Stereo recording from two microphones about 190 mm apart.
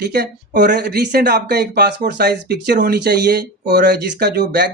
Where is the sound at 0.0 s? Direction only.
60° right (ahead or behind).